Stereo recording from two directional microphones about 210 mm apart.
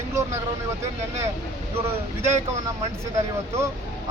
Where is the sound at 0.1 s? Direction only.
10° right (ahead or behind).